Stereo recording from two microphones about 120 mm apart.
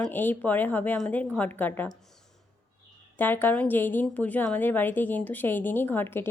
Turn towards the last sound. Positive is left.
turn(degrees=20)  # may be behind; listen again after turning